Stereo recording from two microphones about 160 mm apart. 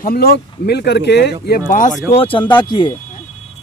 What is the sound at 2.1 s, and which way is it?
Speech, 35° left (ahead or behind).